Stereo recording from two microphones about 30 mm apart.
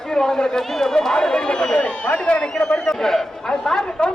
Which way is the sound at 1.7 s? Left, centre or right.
Left.